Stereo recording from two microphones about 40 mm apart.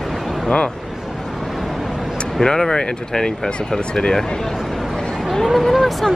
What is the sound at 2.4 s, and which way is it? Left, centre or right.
Speech, centre.